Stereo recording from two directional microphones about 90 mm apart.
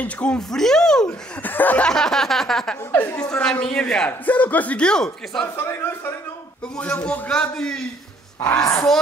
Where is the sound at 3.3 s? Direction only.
5° left (ahead or behind).